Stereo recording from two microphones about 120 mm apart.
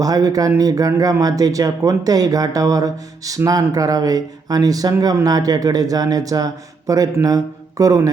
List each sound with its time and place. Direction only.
0.0 s speech: 30° right (ahead or behind)